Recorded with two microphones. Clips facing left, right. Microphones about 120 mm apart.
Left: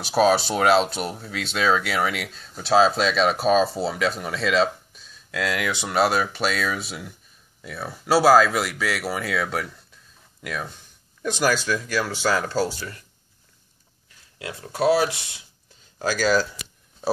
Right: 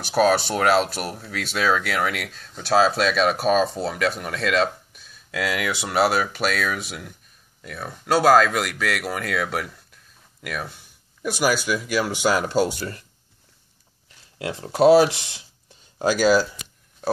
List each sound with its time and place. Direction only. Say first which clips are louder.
0.0 s speech: even; centre (ahead or behind); by 12.7 s 20° right (ahead or behind)
14.4 s speech: right 5 dB; 30° right (ahead or behind)
16.0 s speech: right 3 dB; 15° right (ahead or behind)